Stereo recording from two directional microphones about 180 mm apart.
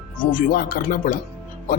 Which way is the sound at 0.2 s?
50° left (ahead or behind).